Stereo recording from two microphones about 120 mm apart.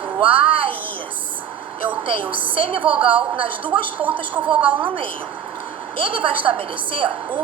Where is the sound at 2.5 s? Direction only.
50° right (ahead or behind).